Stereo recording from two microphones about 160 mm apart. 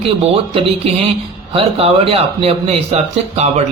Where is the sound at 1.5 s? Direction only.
35° right (ahead or behind).